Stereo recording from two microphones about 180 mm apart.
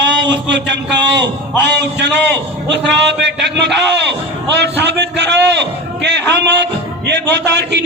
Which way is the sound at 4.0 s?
70° right (ahead or behind).